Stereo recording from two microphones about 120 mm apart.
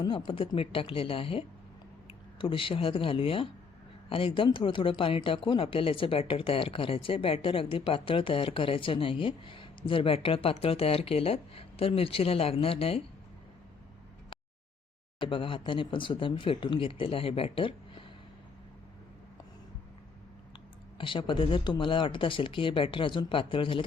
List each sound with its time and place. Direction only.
0.0 s speech: 40° left (ahead or behind)
15.2 s speech: 45° left (ahead or behind)
21.0 s speech: 45° left (ahead or behind)